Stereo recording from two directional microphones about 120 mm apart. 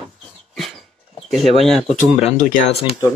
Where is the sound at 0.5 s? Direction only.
Centre (ahead or behind).